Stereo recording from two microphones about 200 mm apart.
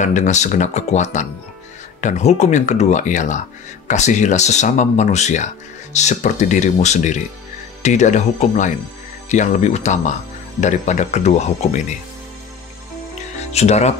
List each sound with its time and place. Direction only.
0.0 s speech: 35° left (ahead or behind)
13.4 s speech: 35° left (ahead or behind)